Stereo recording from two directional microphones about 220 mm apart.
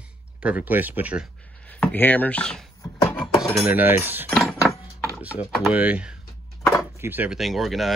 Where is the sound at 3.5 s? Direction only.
5° right (ahead or behind).